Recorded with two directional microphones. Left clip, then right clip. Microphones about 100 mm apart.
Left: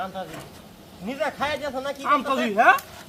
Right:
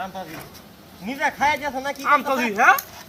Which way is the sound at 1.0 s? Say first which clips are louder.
Right 5 dB; 35° right (ahead or behind).